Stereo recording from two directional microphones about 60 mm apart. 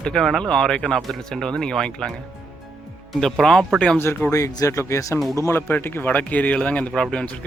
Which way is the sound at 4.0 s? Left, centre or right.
Left.